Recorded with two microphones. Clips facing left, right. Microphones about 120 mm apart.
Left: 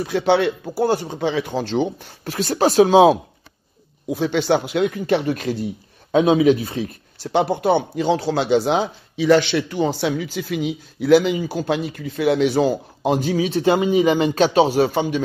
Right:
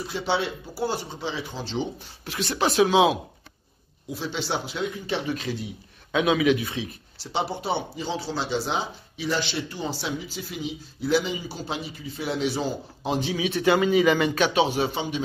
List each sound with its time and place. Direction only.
0.0 s speech: 60° left (ahead or behind); by 3.2 s 40° left (ahead or behind)
4.1 s speech: 60° left (ahead or behind)
6.1 s speech: 35° left (ahead or behind)
13.5 s a man's voice: 30° left (ahead or behind); by 15.2 s 50° left (ahead or behind)